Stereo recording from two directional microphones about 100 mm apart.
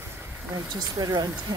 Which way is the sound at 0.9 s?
40° right (ahead or behind).